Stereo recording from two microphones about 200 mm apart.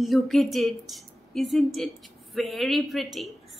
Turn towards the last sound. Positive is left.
turn(degrees=0)  # may be behind; listen again after turning